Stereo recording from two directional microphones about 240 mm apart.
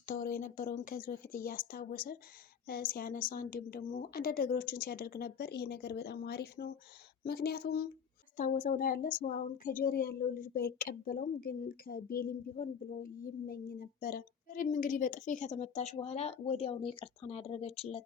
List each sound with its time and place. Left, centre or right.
0.0 s a woman's voice: left